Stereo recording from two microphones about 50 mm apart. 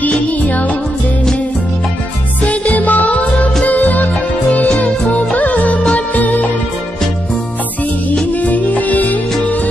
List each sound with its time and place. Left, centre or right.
0.0 s music: left
2.4 s music: left
8.1 s music: left